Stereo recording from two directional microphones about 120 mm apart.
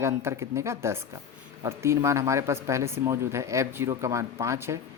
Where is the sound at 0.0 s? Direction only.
20° right (ahead or behind).